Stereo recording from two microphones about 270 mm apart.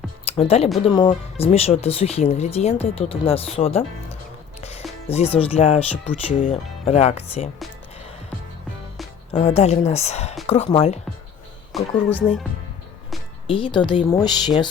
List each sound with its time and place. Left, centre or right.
0.3 s speech: left
9.3 s speech: left
11.7 s speech: centre
13.5 s speech: centre